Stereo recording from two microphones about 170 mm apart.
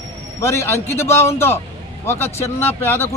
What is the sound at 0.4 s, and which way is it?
Speech, 15° left (ahead or behind).